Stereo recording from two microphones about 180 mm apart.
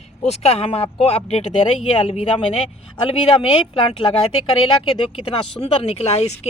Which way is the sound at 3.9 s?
30° left (ahead or behind).